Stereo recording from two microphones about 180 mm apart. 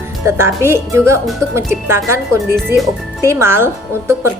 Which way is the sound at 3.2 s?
15° right (ahead or behind).